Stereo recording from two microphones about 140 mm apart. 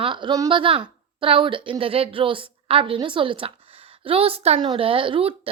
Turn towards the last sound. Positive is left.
turn(degrees=-40)  # may be behind; listen again after turning